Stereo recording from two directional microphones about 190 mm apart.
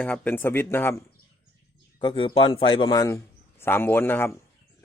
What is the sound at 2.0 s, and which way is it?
A man's voice, 25° left (ahead or behind).